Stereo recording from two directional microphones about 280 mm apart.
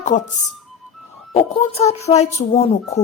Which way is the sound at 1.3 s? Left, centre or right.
Left.